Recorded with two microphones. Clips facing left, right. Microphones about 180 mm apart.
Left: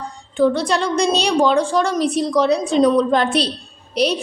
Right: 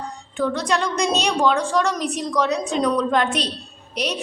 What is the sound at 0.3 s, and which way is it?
A woman's voice, 30° left (ahead or behind).